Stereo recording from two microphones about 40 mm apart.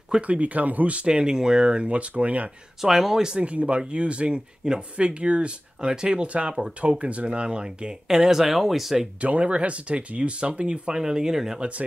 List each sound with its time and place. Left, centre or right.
0.2 s speech: right
2.8 s speech: centre
3.3 s speech: right; by 9.0 s centre
9.2 s speech: right; by 11.6 s centre